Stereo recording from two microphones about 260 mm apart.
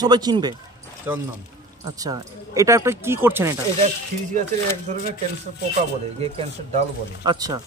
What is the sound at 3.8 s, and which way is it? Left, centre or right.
Speech, right.